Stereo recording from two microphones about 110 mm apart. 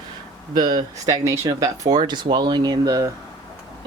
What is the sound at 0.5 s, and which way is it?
Speech, 35° right (ahead or behind).